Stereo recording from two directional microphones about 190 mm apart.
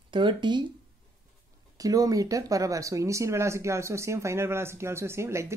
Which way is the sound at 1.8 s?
20° right (ahead or behind).